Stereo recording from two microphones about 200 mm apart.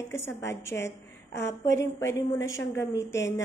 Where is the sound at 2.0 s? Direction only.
75° left (ahead or behind).